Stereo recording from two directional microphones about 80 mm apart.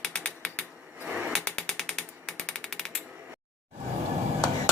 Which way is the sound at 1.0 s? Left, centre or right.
Centre.